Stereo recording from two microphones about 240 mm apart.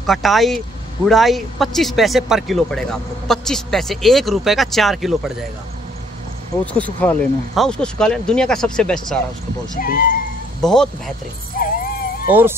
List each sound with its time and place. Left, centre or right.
0.0 s speech: centre
6.6 s speech: centre
9.8 s speech: left
10.6 s speech: centre
11.6 s dog: left
12.3 s speech: centre